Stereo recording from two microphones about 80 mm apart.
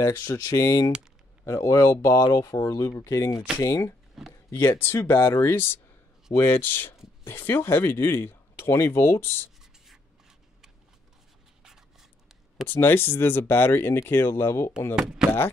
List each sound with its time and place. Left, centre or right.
0.0 s speech: left
4.3 s a sound: left
4.7 s speech: left
12.6 s speech: left
15.0 s speech: centre